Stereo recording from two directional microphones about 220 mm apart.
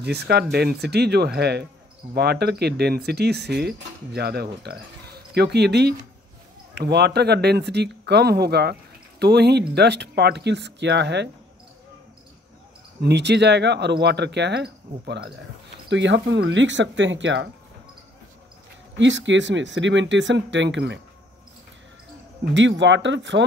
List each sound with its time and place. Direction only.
0.0 s speech: 50° right (ahead or behind)
13.0 s speech: 50° right (ahead or behind)
18.9 s speech: 55° right (ahead or behind)
22.4 s speech: 55° right (ahead or behind)